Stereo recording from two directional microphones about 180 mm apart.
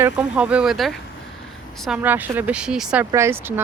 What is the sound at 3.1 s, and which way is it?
Speech, 15° right (ahead or behind).